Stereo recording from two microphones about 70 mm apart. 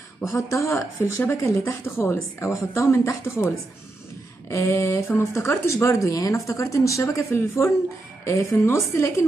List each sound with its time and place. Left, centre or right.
0.2 s speech: left
4.5 s speech: left